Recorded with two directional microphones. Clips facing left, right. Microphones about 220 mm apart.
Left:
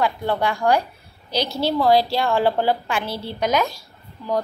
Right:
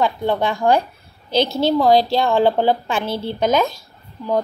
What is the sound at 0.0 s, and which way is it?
A woman's voice, 20° right (ahead or behind).